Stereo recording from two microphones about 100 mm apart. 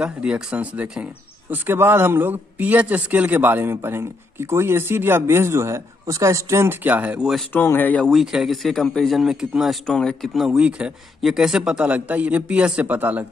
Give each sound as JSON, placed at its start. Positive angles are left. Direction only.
{"t": 0.0, "sound": "speech", "side_deg": -10}
{"t": 1.5, "sound": "a man's voice", "side_deg": -20}
{"t": 7.5, "sound": "speech", "side_deg": 20}
{"t": 8.0, "sound": "speech", "side_deg": 0}
{"t": 9.8, "sound": "speech", "side_deg": 5}